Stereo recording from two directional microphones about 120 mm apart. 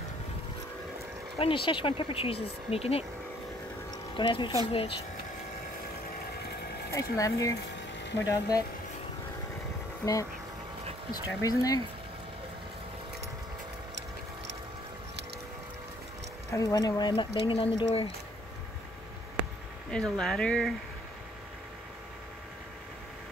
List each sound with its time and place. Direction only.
1.4 s speech: 50° left (ahead or behind)
3.9 s a sound: 45° left (ahead or behind)
4.6 s speech: 50° left (ahead or behind)
6.9 s speech: 30° left (ahead or behind)
11.4 s speech: 30° left (ahead or behind)
16.5 s speech: 30° left (ahead or behind); by 18.0 s 50° left (ahead or behind)
19.9 s speech: 5° left (ahead or behind)